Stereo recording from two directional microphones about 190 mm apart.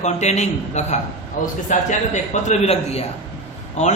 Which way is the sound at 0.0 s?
35° left (ahead or behind).